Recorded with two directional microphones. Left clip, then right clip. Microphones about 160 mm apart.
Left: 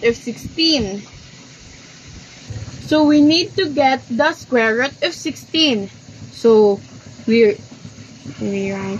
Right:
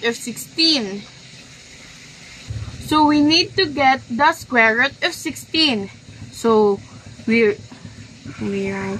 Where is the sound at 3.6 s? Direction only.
40° right (ahead or behind).